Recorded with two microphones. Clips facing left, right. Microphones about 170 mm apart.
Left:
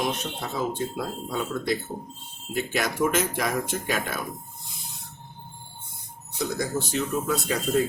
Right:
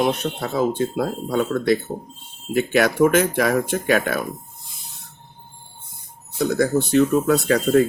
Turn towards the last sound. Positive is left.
turn(degrees=-70)  # may be behind; listen again after turning